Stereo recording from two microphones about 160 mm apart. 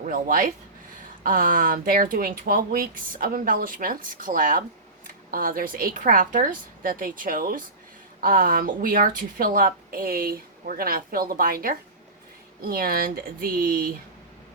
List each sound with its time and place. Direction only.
0.0 s a woman's voice: 60° right (ahead or behind)